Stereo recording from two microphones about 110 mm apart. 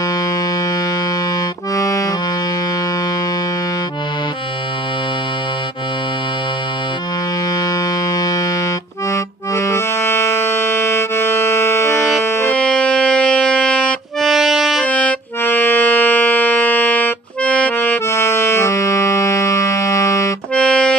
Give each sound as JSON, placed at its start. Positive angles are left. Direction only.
{"t": 1.7, "sound": "music", "side_deg": 30}
{"t": 8.1, "sound": "music", "side_deg": 35}
{"t": 9.1, "sound": "accordion", "side_deg": 25}
{"t": 12.5, "sound": "music", "side_deg": 10}
{"t": 14.8, "sound": "music", "side_deg": 10}
{"t": 20.5, "sound": "music", "side_deg": 10}